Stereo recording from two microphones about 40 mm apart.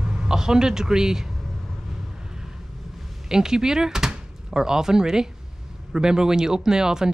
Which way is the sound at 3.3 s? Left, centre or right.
Centre.